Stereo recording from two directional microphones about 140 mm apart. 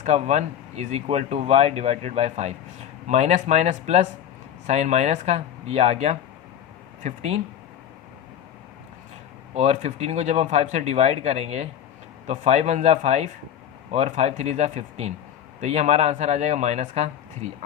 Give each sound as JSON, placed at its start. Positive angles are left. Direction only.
{"t": 0.0, "sound": "speech", "side_deg": -55}
{"t": 9.6, "sound": "speech", "side_deg": -50}